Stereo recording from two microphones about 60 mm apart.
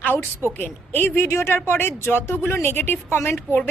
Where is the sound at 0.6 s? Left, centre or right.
Left.